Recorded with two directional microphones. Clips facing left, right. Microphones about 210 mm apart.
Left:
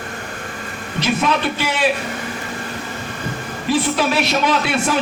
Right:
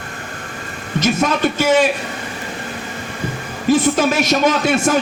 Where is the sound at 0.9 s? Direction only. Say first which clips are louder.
Right 2 dB; 45° right (ahead or behind).